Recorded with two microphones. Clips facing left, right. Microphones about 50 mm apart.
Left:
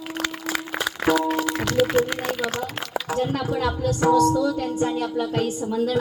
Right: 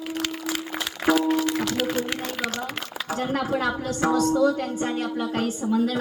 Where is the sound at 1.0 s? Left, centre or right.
Centre.